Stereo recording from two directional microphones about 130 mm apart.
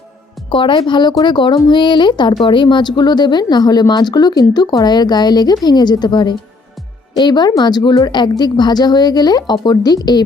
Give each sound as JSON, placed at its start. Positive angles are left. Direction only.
{"t": 0.5, "sound": "speech", "side_deg": 40}